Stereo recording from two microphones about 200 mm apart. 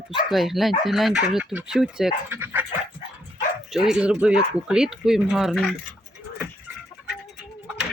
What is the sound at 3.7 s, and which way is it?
Speech, centre (ahead or behind).